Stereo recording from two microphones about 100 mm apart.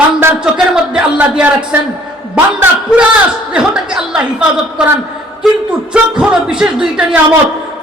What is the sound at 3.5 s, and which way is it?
Speech, 5° right (ahead or behind).